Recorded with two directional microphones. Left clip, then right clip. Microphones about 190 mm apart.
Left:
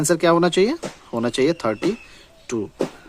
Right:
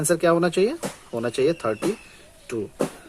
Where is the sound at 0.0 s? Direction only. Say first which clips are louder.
Left 3 dB; 45° left (ahead or behind).